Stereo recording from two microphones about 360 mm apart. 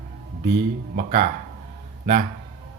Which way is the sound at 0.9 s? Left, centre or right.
Right.